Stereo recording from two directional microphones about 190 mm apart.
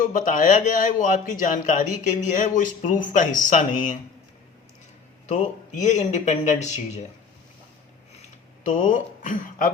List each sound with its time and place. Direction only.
0.0 s speech: 45° left (ahead or behind)
5.2 s speech: 40° left (ahead or behind)
8.6 s speech: 40° left (ahead or behind)